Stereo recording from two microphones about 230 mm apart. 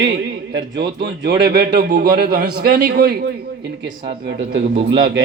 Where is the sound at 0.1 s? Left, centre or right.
Right.